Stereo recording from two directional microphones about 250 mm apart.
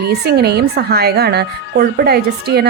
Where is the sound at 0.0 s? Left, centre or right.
Right.